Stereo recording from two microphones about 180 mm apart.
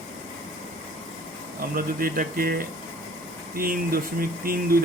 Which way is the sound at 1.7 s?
55° right (ahead or behind).